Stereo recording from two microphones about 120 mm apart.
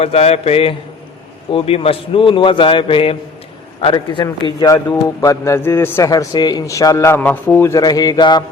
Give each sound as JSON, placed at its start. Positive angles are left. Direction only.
{"t": 0.0, "sound": "a man's voice", "side_deg": 60}
{"t": 4.7, "sound": "a man's voice", "side_deg": 30}
{"t": 6.1, "sound": "a man's voice", "side_deg": 30}